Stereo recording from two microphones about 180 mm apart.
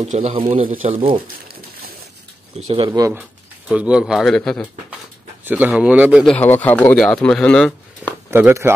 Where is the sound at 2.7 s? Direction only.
25° right (ahead or behind).